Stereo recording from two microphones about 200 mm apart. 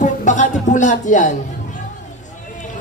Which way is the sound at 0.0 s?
40° left (ahead or behind).